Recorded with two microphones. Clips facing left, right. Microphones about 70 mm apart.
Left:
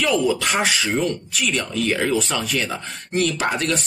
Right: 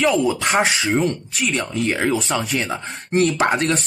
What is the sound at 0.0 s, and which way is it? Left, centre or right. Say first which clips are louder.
Speech: right 2 dB; right.